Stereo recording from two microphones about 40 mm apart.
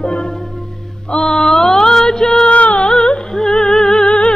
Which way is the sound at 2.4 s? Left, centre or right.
Left.